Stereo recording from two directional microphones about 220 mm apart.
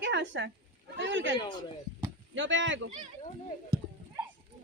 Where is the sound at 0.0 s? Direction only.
55° right (ahead or behind).